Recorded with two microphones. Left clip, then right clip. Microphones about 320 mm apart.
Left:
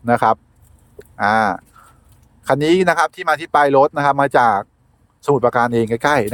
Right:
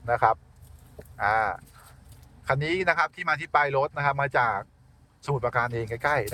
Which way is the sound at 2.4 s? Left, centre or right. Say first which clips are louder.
Left 11 dB; left.